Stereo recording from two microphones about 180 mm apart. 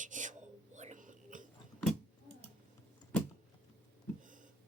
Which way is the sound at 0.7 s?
45° right (ahead or behind).